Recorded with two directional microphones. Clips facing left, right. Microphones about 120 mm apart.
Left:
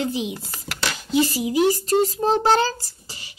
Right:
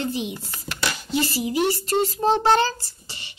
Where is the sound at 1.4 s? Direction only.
10° left (ahead or behind).